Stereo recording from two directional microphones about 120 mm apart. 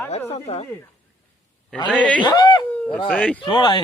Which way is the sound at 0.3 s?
60° left (ahead or behind).